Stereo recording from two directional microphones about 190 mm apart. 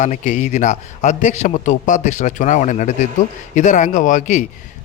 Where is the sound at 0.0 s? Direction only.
40° left (ahead or behind).